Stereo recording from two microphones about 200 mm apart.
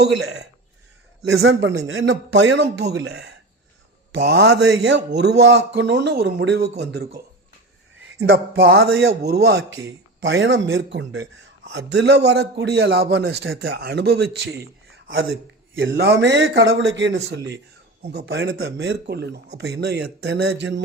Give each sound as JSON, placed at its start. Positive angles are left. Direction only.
{"t": 1.2, "sound": "a man's voice", "side_deg": -70}
{"t": 8.6, "sound": "a man's voice", "side_deg": -55}
{"t": 15.7, "sound": "a man's voice", "side_deg": -60}
{"t": 18.5, "sound": "a man's voice", "side_deg": -75}